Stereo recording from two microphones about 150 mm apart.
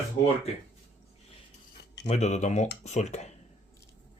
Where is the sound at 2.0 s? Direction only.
50° left (ahead or behind).